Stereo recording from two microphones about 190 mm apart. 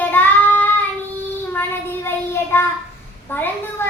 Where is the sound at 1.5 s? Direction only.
10° left (ahead or behind).